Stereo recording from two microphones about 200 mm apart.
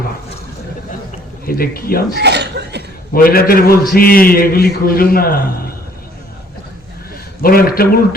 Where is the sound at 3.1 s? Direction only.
50° left (ahead or behind).